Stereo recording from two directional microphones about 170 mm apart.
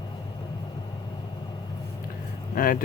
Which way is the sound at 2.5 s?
55° left (ahead or behind).